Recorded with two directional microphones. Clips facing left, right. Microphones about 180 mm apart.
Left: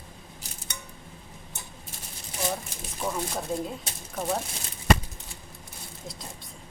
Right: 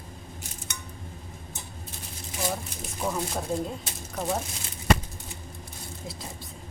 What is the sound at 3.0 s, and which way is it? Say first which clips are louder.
A woman's voice: right 1 dB; centre (ahead or behind).